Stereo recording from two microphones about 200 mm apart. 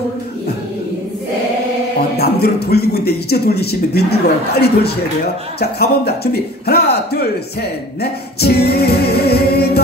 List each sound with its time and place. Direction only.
2.0 s speech: 50° left (ahead or behind)